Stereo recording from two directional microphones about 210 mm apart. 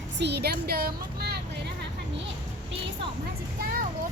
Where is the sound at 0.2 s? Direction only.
50° right (ahead or behind).